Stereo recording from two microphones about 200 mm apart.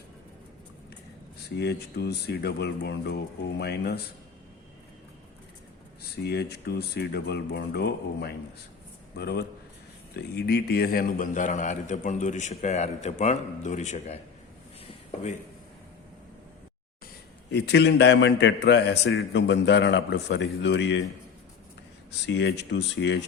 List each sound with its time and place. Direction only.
1.5 s a man's voice: 55° left (ahead or behind)
6.0 s a man's voice: 55° left (ahead or behind); by 14.2 s 35° left (ahead or behind)
17.5 s a man's voice: 60° left (ahead or behind)
22.3 s a man's voice: 60° left (ahead or behind)